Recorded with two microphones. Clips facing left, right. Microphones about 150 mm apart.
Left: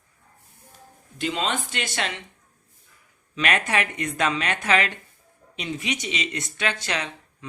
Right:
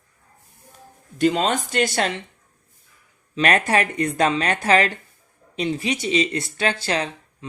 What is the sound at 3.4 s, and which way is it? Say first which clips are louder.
Speech: right 5 dB; 35° right (ahead or behind).